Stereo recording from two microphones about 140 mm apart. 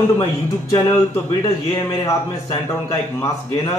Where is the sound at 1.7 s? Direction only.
25° left (ahead or behind).